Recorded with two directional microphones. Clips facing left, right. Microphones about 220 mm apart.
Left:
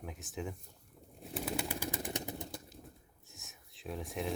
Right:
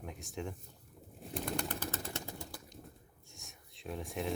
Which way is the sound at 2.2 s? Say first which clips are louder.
Left 3 dB; 20° left (ahead or behind).